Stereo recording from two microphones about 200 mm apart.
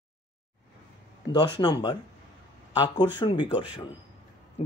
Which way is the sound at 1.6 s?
20° left (ahead or behind).